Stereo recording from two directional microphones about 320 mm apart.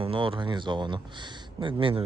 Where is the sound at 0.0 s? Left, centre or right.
Centre.